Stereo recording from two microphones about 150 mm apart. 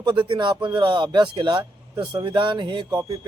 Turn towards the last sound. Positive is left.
turn(degrees=-25)  # may be behind; listen again after turning